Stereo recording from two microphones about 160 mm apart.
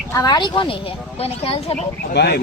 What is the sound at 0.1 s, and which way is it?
Speech, 25° left (ahead or behind).